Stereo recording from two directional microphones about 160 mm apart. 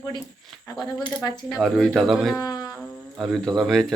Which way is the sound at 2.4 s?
25° left (ahead or behind).